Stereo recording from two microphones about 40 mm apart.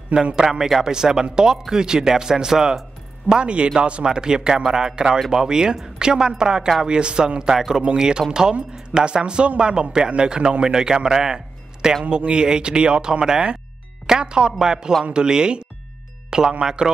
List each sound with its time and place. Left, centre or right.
0.4 s speech: centre
3.3 s a man's voice: right
7.5 s a man's voice: centre